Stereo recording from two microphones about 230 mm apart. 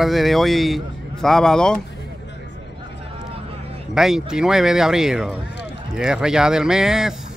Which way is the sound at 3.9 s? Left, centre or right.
Centre.